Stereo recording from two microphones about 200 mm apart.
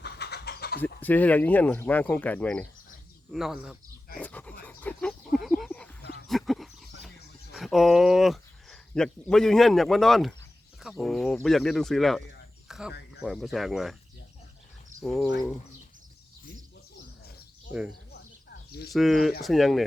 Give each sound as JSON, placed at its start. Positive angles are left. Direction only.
{"t": 0.0, "sound": "a sound", "side_deg": 55}
{"t": 1.0, "sound": "speech", "side_deg": 10}
{"t": 4.2, "sound": "dog", "side_deg": 10}
{"t": 4.6, "sound": "a sound", "side_deg": 10}
{"t": 6.2, "sound": "dog", "side_deg": 0}
{"t": 7.5, "sound": "speech", "side_deg": 0}
{"t": 12.6, "sound": "a sound", "side_deg": 0}
{"t": 13.2, "sound": "speech", "side_deg": 0}
{"t": 15.0, "sound": "speech", "side_deg": 0}
{"t": 17.7, "sound": "speech", "side_deg": -5}
{"t": 18.1, "sound": "a sound", "side_deg": 55}
{"t": 18.9, "sound": "speech", "side_deg": 0}